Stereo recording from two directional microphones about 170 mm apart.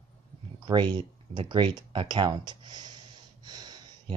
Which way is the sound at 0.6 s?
25° right (ahead or behind).